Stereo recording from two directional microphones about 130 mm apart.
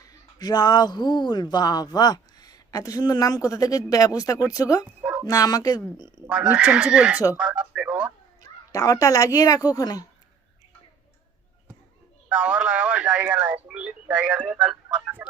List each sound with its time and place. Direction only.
0.0 s speech: 30° left (ahead or behind)
6.2 s speech: 10° right (ahead or behind)
8.4 s speech: 25° left (ahead or behind)
12.3 s a sound: 10° right (ahead or behind)